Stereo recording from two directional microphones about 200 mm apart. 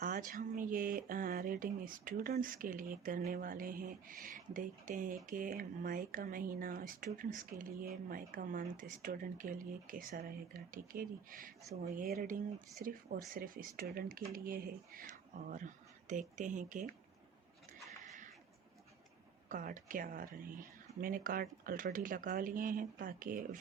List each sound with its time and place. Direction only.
0.0 s speech: 40° right (ahead or behind)
19.5 s speech: 40° right (ahead or behind)